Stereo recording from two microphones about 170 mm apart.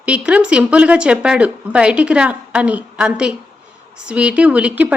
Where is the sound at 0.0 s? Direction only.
5° right (ahead or behind).